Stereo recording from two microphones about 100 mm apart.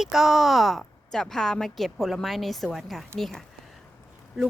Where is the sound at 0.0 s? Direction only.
5° right (ahead or behind).